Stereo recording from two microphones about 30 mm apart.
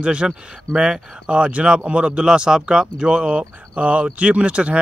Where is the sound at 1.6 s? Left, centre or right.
Right.